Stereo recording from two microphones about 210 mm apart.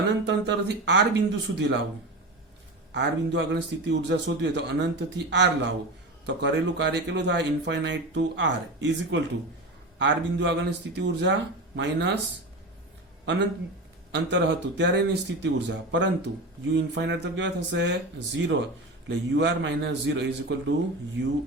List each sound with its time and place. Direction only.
0.3 s speech: 55° right (ahead or behind)
2.9 s speech: 55° right (ahead or behind)
14.1 s speech: 60° right (ahead or behind)